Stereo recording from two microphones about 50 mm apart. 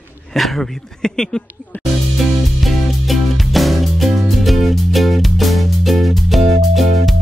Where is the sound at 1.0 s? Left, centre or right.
Centre.